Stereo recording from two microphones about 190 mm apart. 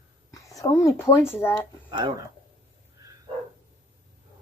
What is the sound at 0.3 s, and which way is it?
A woman's voice, 15° left (ahead or behind).